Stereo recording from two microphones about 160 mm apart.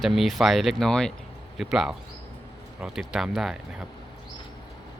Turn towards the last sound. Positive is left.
turn(degrees=0)  # may be behind; listen again after turning